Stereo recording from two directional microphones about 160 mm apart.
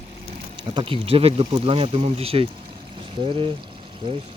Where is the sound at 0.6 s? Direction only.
30° right (ahead or behind).